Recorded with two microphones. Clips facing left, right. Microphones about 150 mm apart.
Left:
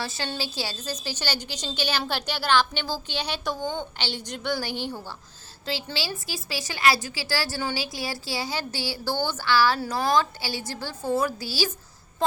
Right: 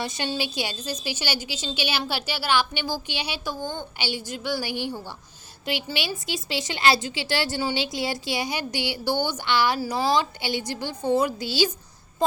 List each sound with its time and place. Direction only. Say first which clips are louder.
0.0 s a woman's voice: right 3 dB; 15° right (ahead or behind)